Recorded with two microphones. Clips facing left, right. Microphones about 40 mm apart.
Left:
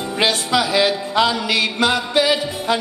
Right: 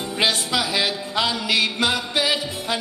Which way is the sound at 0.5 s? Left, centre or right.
Centre.